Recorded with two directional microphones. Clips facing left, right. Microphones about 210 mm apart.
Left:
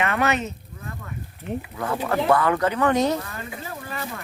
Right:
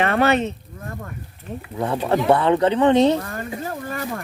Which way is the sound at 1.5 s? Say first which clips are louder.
Left 4 dB; 15° left (ahead or behind).